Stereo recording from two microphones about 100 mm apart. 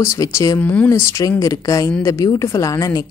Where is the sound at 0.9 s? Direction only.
30° left (ahead or behind).